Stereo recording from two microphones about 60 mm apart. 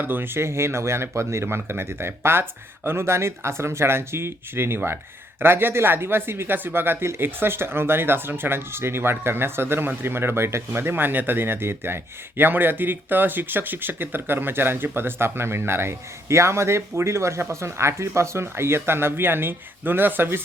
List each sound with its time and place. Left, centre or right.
0.0 s speech: right